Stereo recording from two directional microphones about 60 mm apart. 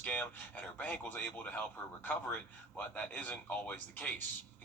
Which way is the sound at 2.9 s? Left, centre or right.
Left.